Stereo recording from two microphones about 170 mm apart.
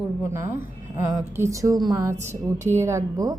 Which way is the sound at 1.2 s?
15° right (ahead or behind).